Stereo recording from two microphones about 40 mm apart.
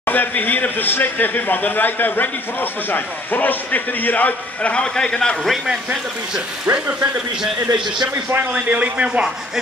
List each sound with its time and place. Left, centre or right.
0.0 s speech: left
4.9 s a man's voice: left
6.6 s speech: right
8.5 s speech: right